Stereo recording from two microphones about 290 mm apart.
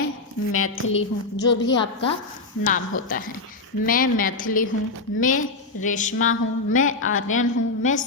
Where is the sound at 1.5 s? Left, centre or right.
Left.